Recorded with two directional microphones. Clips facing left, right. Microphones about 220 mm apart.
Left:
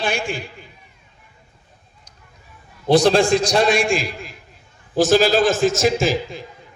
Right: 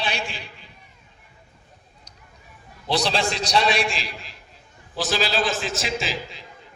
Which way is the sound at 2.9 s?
50° left (ahead or behind).